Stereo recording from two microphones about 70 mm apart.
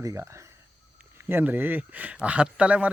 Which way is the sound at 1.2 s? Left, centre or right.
Right.